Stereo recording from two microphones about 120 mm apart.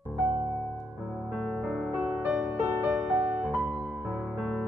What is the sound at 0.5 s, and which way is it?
Music, 15° left (ahead or behind).